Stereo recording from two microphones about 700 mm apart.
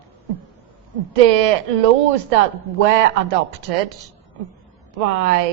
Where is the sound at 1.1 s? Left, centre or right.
Right.